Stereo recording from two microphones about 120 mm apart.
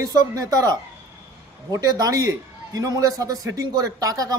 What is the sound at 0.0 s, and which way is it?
A man's voice, 30° right (ahead or behind).